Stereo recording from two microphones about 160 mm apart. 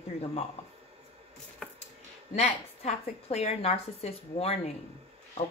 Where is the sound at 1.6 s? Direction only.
5° left (ahead or behind).